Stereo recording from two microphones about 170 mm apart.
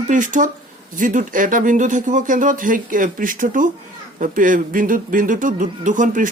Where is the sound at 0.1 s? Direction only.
50° right (ahead or behind).